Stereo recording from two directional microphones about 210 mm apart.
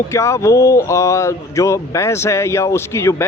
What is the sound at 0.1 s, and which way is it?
Speech, 15° left (ahead or behind).